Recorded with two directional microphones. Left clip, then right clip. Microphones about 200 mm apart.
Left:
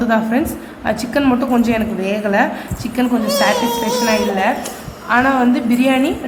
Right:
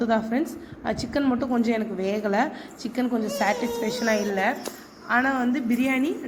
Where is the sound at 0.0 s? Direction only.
15° right (ahead or behind).